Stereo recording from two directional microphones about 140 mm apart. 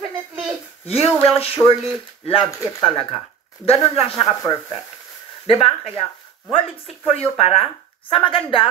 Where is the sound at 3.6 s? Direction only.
45° left (ahead or behind).